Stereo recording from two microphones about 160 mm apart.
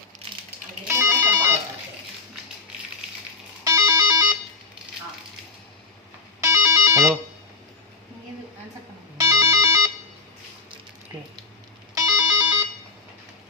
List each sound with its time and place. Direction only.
0.9 s music: 15° right (ahead or behind)
3.6 s music: 20° right (ahead or behind)
6.4 s music: 20° right (ahead or behind)
9.1 s ringtone: 20° right (ahead or behind)
12.1 s ringtone: 25° right (ahead or behind)